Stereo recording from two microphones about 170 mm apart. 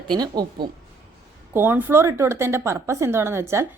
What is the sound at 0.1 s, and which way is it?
Speech, 25° right (ahead or behind).